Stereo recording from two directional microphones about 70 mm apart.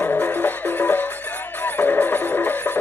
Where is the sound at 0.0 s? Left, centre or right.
Left.